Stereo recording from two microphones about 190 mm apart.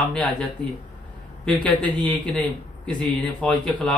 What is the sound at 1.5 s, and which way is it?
Speech, 5° left (ahead or behind).